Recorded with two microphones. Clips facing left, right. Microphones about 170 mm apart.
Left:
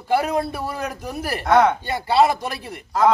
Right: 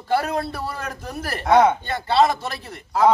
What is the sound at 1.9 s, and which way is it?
Speech, 10° left (ahead or behind).